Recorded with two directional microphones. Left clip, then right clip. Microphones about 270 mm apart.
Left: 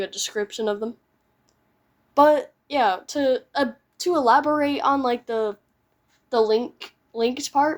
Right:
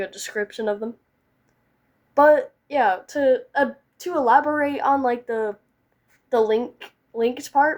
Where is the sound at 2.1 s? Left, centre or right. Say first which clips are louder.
Right 1 dB; centre.